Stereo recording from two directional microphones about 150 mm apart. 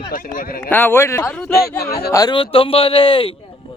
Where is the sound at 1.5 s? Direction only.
90° left.